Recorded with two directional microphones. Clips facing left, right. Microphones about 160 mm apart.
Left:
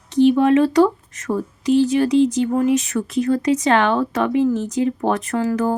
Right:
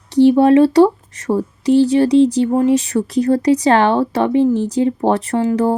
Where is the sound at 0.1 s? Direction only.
35° right (ahead or behind).